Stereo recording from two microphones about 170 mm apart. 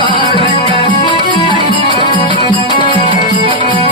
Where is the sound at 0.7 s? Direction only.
30° left (ahead or behind).